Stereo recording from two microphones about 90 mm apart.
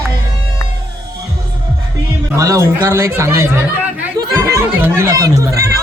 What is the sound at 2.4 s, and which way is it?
Speech, 35° right (ahead or behind).